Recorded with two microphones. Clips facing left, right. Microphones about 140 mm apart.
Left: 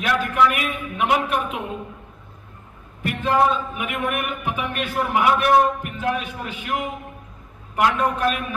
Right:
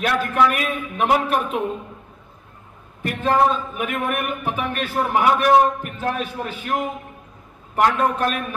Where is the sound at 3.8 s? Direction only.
40° right (ahead or behind).